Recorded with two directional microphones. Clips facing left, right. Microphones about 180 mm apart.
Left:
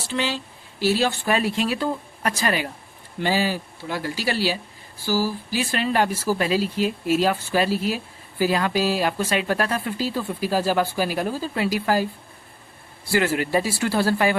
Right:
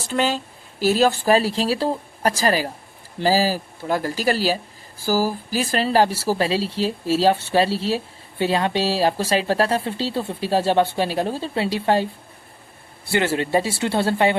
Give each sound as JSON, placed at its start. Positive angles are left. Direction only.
{"t": 0.1, "sound": "speech", "side_deg": -45}
{"t": 13.1, "sound": "speech", "side_deg": -25}